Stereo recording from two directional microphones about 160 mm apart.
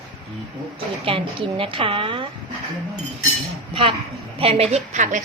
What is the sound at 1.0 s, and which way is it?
A woman's voice, 35° right (ahead or behind).